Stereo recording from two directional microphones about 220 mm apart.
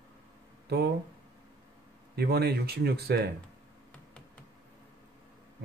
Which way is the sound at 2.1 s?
45° right (ahead or behind).